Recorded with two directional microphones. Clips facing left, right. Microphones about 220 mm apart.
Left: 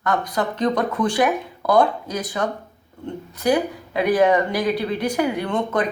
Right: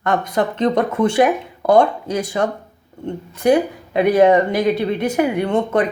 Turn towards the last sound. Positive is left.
turn(degrees=-25)  # may be behind; listen again after turning